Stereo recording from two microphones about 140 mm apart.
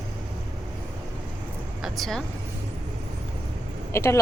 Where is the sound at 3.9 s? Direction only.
20° left (ahead or behind).